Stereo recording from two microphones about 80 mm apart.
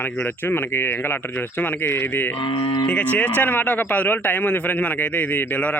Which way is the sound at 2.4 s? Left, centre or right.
Left.